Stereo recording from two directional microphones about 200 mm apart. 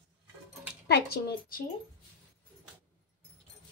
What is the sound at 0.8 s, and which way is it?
Speech, 55° left (ahead or behind).